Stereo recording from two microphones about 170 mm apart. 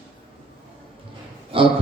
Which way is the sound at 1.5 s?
30° right (ahead or behind).